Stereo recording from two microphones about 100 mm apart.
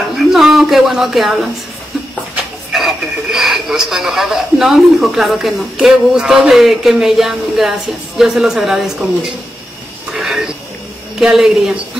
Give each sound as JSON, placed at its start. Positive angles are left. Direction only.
{"t": 0.3, "sound": "speech", "side_deg": -5}
{"t": 2.7, "sound": "speech", "side_deg": -5}
{"t": 10.1, "sound": "a sound", "side_deg": -5}
{"t": 11.1, "sound": "speech", "side_deg": -5}